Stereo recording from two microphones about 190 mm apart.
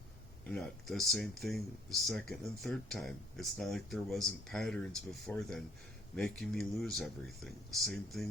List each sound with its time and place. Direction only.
0.4 s speech: 5° left (ahead or behind)